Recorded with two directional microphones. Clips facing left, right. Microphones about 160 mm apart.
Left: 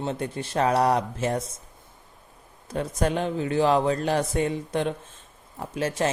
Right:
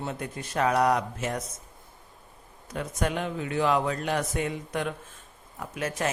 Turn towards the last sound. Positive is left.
turn(degrees=30)  # may be behind; listen again after turning